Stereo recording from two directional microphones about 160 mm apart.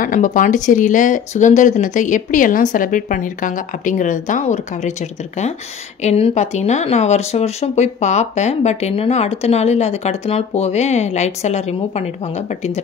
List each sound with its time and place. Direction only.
0.0 s speech: 55° left (ahead or behind)
6.0 s speech: 40° left (ahead or behind)